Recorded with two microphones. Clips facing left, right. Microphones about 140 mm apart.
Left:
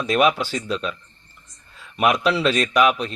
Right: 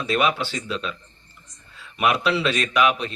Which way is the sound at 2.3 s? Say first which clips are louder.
Left 3 dB; 40° left (ahead or behind).